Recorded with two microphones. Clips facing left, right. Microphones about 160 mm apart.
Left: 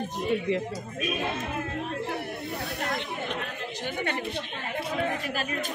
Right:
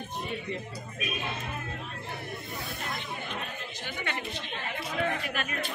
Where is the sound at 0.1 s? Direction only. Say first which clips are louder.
Left 9 dB; 90° left.